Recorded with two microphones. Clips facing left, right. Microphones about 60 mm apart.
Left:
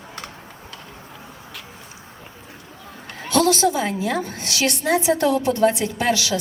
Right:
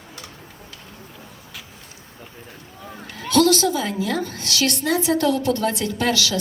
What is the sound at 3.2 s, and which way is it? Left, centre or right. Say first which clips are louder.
A woman's voice: right 1 dB; left.